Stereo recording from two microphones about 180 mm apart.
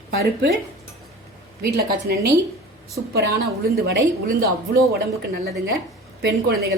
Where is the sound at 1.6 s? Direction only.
60° right (ahead or behind).